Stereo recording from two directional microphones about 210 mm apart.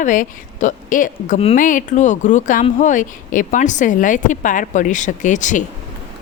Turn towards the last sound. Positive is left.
turn(degrees=35)  # may be behind; listen again after turning